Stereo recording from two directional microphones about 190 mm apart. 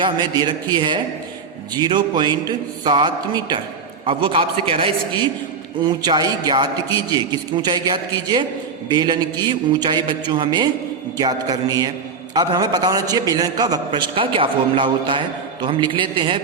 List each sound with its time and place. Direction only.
0.0 s a man's voice: 25° right (ahead or behind)